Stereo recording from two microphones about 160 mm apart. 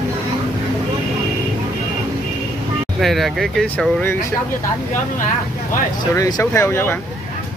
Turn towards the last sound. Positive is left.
turn(degrees=15)  # may be behind; listen again after turning